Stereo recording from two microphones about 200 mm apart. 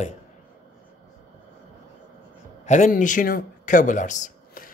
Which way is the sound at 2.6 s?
35° left (ahead or behind).